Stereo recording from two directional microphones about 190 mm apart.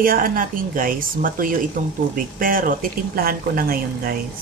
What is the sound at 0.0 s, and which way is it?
Speech, 50° right (ahead or behind).